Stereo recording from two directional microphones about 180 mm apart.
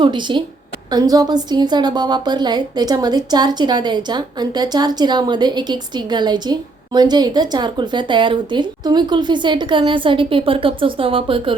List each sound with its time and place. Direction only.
0.0 s a woman's voice: 25° right (ahead or behind)